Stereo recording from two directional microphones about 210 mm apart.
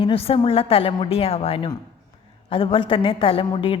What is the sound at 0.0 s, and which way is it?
A woman's voice, 25° left (ahead or behind).